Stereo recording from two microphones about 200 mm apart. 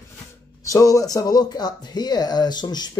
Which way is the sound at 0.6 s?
15° left (ahead or behind).